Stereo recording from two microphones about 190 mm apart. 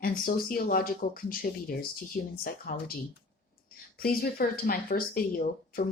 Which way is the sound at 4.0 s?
50° left (ahead or behind).